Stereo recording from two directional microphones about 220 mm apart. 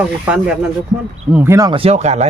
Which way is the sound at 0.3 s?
5° right (ahead or behind).